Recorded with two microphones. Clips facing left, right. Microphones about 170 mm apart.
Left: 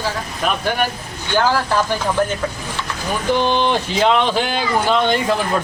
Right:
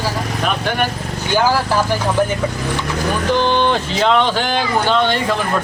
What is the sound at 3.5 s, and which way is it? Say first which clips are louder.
Speech: right 1 dB; 15° left (ahead or behind).